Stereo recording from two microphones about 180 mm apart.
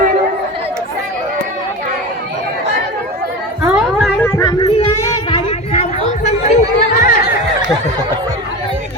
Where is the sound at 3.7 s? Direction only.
Centre (ahead or behind).